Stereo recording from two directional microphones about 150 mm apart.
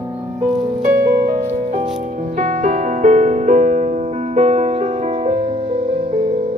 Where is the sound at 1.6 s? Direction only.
45° right (ahead or behind).